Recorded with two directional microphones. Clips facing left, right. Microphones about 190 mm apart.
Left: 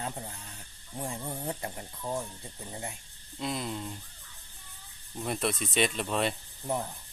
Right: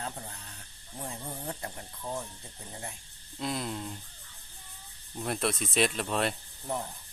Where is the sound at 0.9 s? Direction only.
10° left (ahead or behind).